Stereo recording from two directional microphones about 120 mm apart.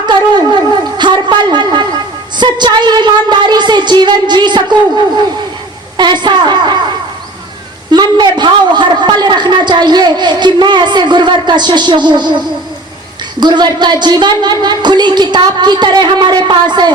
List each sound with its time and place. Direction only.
0.0 s shofar: 40° right (ahead or behind)
0.9 s a sound: 40° right (ahead or behind)
2.4 s a woman's voice: 40° right (ahead or behind)
7.9 s a woman's voice: 40° right (ahead or behind)
13.4 s a woman's voice: 35° right (ahead or behind)